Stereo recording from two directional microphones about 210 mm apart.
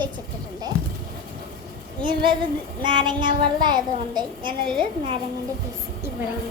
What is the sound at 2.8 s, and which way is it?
A child's voice, 20° right (ahead or behind).